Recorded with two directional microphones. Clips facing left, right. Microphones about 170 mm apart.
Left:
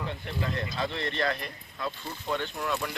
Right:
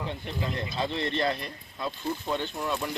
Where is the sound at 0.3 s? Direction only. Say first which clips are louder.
Left 1 dB; 20° right (ahead or behind).